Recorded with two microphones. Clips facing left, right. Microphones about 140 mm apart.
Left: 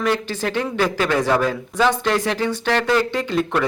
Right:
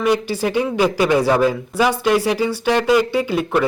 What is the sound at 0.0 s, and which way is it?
Speech, 15° right (ahead or behind).